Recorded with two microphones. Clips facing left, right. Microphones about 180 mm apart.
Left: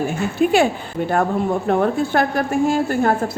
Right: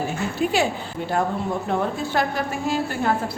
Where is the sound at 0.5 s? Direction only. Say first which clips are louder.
Left 6 dB; 55° left (ahead or behind).